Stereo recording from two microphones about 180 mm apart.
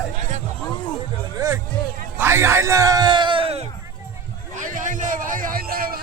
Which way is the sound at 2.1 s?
15° right (ahead or behind).